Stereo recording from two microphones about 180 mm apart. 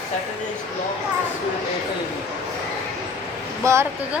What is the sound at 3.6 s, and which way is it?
Speech, 15° right (ahead or behind).